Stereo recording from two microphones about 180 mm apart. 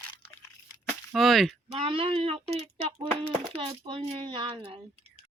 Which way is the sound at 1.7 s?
30° right (ahead or behind).